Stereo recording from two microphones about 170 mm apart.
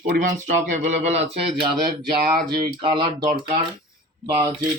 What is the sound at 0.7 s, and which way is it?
Speech, 40° right (ahead or behind).